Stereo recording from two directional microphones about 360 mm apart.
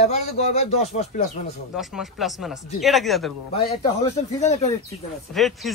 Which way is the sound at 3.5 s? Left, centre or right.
Centre.